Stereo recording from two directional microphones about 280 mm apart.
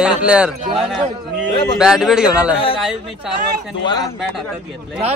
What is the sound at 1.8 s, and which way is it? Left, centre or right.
Speech, centre.